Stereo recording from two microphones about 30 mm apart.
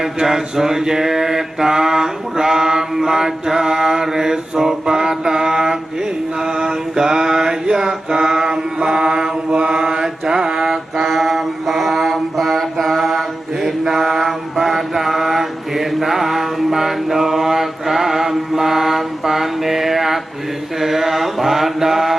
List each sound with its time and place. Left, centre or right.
0.0 s mantra: centre
10.7 s mantra: centre